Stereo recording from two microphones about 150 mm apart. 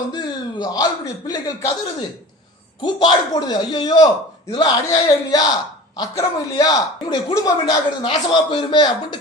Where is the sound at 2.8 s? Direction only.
30° left (ahead or behind).